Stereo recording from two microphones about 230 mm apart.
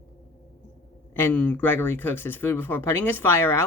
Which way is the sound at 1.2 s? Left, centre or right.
Centre.